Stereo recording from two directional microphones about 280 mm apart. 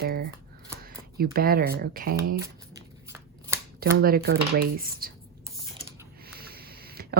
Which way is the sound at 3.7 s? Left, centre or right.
Right.